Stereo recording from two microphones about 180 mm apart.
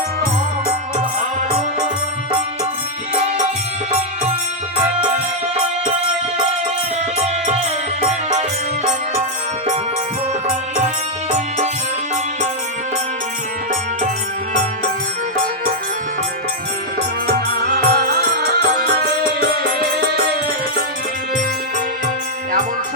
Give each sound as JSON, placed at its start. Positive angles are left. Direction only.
{"t": 11.3, "sound": "music", "side_deg": -40}
{"t": 17.2, "sound": "music", "side_deg": -55}